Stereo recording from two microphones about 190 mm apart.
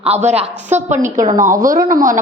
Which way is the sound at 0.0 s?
35° right (ahead or behind).